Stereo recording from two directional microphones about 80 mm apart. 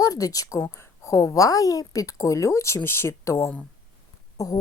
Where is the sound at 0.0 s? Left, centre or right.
Left.